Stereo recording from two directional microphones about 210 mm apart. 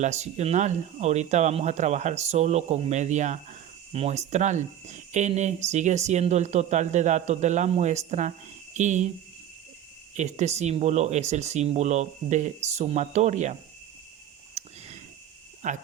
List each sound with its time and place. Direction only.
0.0 s speech: 30° right (ahead or behind)
10.2 s speech: 35° right (ahead or behind)
14.6 s a sound: 30° right (ahead or behind)
15.6 s speech: 35° right (ahead or behind)